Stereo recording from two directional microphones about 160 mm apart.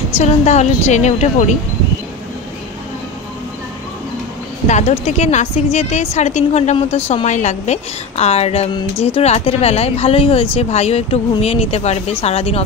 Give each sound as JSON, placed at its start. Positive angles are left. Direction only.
{"t": 0.2, "sound": "a woman's voice", "side_deg": 45}
{"t": 4.6, "sound": "a woman's voice", "side_deg": 45}